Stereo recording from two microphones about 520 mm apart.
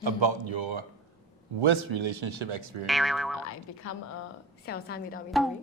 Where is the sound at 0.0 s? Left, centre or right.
Right.